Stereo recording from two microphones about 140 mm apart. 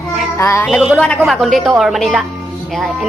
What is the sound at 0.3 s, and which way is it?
Music, 20° left (ahead or behind).